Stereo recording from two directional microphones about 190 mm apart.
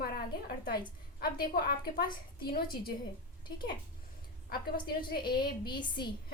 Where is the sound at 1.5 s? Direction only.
55° left (ahead or behind).